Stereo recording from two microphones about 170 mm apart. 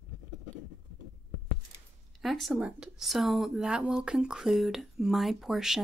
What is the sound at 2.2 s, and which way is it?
Speech, centre (ahead or behind).